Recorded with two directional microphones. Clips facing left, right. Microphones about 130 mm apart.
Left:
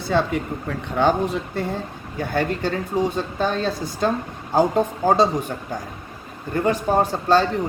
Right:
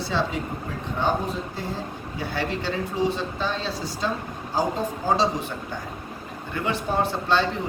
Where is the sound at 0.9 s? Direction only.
75° left (ahead or behind).